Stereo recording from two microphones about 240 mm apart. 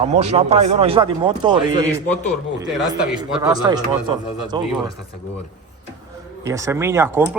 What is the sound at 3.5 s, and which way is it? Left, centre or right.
A man's voice, centre.